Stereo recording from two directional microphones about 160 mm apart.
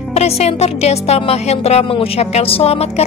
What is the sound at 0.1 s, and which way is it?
Speech, 40° left (ahead or behind).